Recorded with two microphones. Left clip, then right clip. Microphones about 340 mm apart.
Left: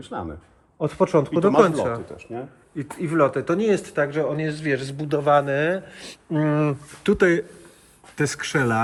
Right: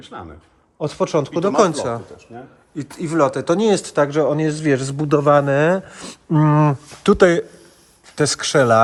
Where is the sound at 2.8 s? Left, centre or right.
Centre.